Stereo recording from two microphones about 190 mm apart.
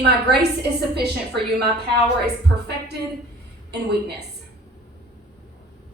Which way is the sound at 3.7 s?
60° right (ahead or behind).